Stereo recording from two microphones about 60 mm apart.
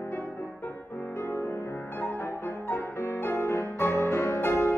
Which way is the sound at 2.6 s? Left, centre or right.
Left.